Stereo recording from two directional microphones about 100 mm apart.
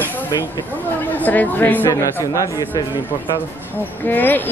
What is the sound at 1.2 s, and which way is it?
Speech, 15° left (ahead or behind).